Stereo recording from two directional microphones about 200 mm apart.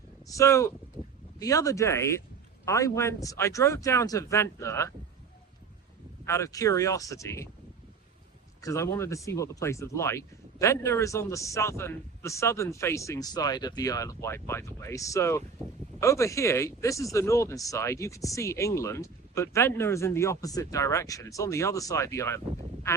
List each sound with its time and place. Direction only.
0.3 s speech: 15° left (ahead or behind)
6.2 s speech: 15° left (ahead or behind)
8.6 s speech: 15° left (ahead or behind)